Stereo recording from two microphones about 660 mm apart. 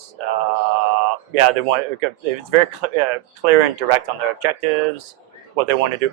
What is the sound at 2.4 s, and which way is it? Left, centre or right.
Speech, right.